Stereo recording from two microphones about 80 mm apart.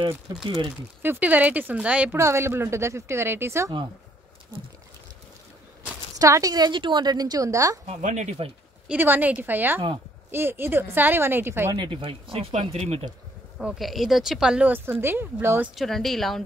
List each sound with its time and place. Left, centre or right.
0.4 s speech: right
1.0 s a woman's voice: right
2.1 s speech: right
6.1 s speech: right
6.5 s a woman's voice: right
8.8 s a woman's voice: right
11.7 s speech: right
13.6 s speech: centre
14.7 s a woman's voice: right
15.7 s speech: centre